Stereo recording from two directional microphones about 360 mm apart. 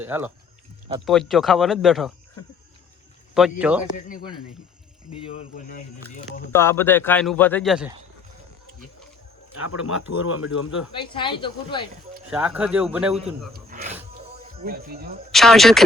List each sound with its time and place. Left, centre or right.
0.0 s a man's voice: centre
3.6 s a man's voice: centre
5.2 s speech: centre
6.5 s a man's voice: centre
9.6 s speech: left
10.9 s speech: centre
12.3 s a man's voice: centre
13.5 s a sound: right
14.6 s speech: right
15.3 s a man's voice: centre